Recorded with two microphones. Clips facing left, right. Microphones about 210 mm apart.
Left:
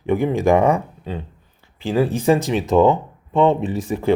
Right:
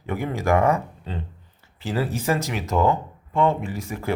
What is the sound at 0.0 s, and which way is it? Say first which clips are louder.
Speech: left 8 dB; 15° left (ahead or behind).